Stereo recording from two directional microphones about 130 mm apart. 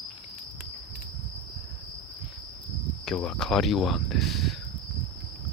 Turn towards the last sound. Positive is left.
turn(degrees=0)  # may be behind; listen again after turning